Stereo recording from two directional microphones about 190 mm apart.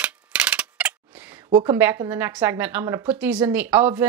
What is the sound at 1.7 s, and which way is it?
A woman's voice, 15° right (ahead or behind).